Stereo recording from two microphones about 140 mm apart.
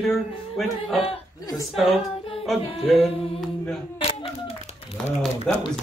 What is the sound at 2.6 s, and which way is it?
Music, 45° left (ahead or behind).